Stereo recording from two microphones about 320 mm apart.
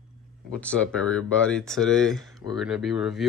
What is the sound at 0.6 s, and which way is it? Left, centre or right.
Speech, centre.